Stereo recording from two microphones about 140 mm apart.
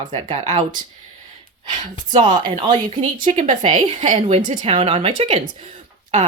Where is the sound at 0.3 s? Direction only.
55° right (ahead or behind).